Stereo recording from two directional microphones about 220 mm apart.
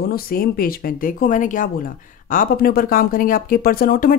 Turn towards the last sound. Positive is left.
turn(degrees=40)  # may be behind; listen again after turning